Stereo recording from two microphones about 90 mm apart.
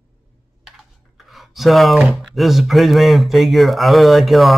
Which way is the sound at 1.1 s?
Centre (ahead or behind).